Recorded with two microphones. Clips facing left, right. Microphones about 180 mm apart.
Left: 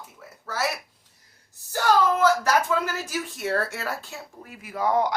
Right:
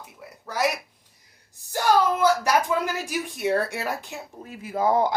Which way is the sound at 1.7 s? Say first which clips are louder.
Even; 15° right (ahead or behind).